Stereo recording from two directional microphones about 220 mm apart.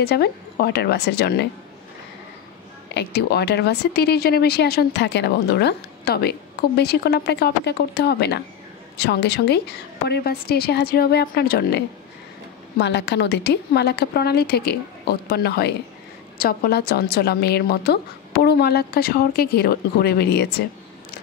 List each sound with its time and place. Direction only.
0.0 s a woman's voice: 45° left (ahead or behind)
2.9 s a woman's voice: 50° left (ahead or behind)